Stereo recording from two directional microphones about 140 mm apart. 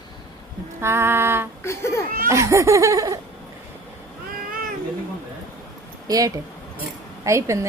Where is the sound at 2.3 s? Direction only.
20° right (ahead or behind).